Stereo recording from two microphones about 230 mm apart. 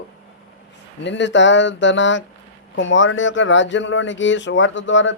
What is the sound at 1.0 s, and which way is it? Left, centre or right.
A man's voice, left.